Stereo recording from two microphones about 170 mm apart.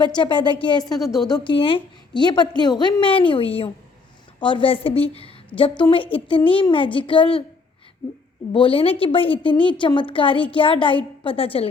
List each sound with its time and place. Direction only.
0.2 s a woman's voice: 30° left (ahead or behind)
0.9 s a woman's voice: centre (ahead or behind)
1.3 s a woman's voice: 30° left (ahead or behind)
8.5 s a woman's voice: 30° left (ahead or behind)